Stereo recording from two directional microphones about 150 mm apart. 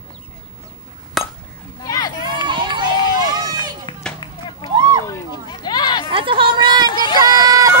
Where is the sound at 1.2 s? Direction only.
Centre (ahead or behind).